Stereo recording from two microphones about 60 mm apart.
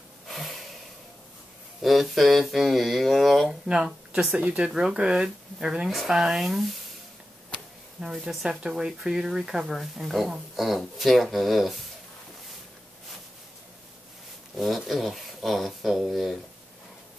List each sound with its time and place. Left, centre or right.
0.3 s snort: centre
1.8 s speech: centre
3.6 s speech: centre
4.4 s speech: right
4.6 s speech: centre
8.0 s speech: centre
14.6 s speech: centre